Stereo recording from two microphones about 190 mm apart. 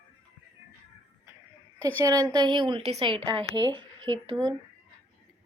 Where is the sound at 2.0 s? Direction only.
20° right (ahead or behind).